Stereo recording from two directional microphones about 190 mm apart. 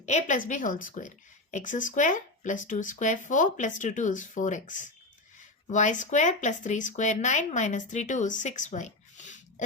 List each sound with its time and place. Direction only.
0.0 s speech: 35° left (ahead or behind)